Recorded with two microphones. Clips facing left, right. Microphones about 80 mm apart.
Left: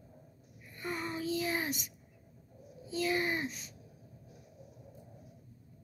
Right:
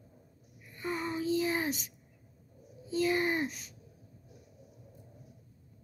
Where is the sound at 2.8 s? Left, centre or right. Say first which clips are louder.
Right 3 dB; right.